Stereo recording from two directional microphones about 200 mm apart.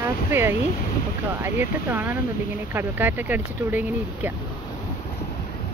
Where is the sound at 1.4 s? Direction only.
10° right (ahead or behind).